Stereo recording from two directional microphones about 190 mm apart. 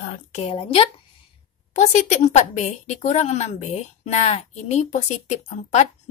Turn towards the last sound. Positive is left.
turn(degrees=35)  # may be behind; listen again after turning